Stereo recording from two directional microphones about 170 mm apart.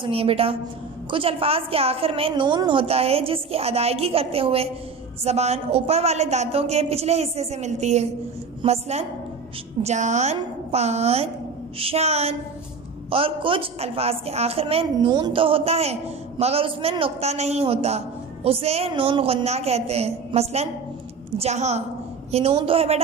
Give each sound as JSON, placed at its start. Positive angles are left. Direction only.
{"t": 0.0, "sound": "a woman's voice", "side_deg": -35}